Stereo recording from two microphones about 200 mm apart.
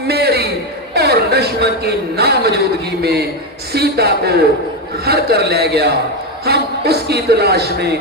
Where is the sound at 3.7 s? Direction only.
55° right (ahead or behind).